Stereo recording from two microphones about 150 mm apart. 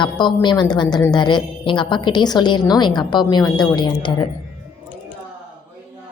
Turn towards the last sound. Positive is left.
turn(degrees=30)  # may be behind; listen again after turning